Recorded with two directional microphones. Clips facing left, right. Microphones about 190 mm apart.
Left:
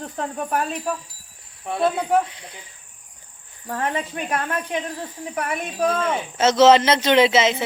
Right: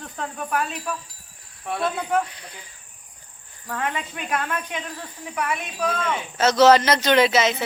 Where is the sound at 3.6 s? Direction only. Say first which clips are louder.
Left 3 dB; 40° left (ahead or behind).